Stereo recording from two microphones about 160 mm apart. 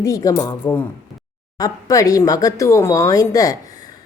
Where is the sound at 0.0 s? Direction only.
20° left (ahead or behind).